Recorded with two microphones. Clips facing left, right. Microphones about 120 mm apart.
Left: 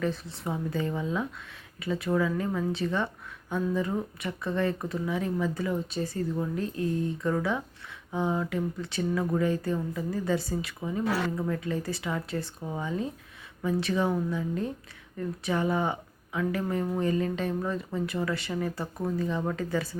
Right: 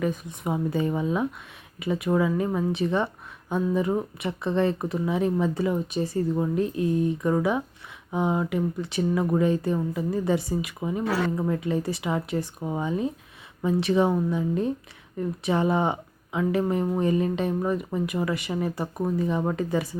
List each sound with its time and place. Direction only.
0.0 s speech: 15° right (ahead or behind)